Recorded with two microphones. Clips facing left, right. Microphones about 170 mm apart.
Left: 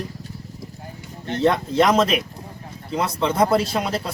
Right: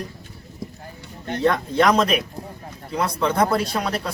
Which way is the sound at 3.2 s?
25° left (ahead or behind).